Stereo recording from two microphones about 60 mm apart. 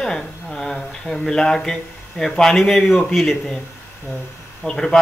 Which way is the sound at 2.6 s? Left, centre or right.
Centre.